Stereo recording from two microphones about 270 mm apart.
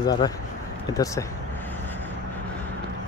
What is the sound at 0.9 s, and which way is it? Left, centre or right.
Speech, centre.